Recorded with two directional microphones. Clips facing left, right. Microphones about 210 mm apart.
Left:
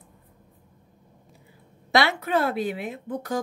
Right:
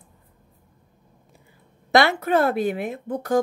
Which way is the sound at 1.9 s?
50° right (ahead or behind).